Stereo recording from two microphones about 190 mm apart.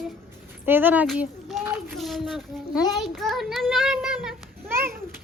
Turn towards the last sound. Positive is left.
turn(degrees=-10)  # may be behind; listen again after turning